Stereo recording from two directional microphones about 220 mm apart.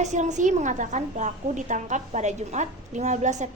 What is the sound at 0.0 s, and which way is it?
A woman's voice, 35° right (ahead or behind).